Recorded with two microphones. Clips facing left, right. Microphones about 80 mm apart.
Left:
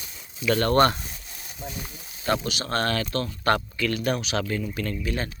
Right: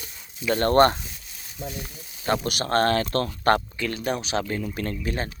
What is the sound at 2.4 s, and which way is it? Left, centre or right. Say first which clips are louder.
Speech: right 3 dB; right.